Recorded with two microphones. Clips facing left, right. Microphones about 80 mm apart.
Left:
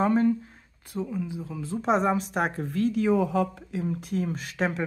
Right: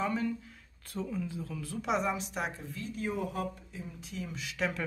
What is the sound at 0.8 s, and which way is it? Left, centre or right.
Speech, centre.